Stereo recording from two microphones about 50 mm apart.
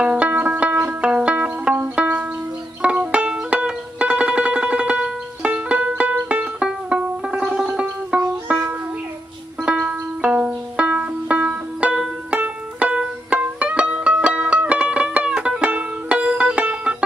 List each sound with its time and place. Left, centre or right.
0.0 s music: right
2.8 s music: right
9.6 s banjo: centre
12.3 s music: right